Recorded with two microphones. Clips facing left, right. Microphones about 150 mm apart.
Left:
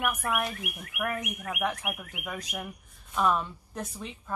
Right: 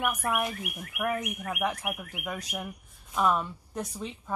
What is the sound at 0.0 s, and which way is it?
A woman's voice, 10° right (ahead or behind).